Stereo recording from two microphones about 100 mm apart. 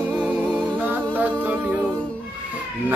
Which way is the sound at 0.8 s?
15° right (ahead or behind).